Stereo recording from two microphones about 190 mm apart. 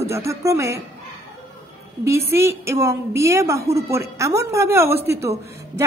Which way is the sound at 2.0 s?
15° right (ahead or behind).